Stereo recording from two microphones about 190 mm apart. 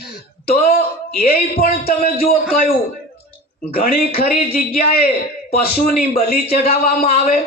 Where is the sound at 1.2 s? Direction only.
50° left (ahead or behind).